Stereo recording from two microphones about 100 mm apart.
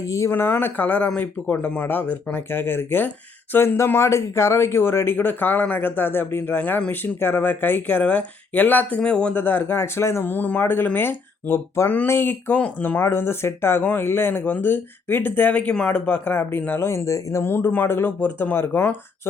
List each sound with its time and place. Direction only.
0.0 s speech: 30° left (ahead or behind)